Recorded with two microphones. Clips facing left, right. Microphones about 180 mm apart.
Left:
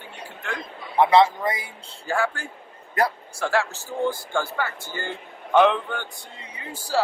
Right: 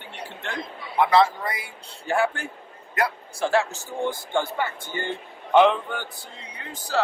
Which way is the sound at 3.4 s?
20° right (ahead or behind).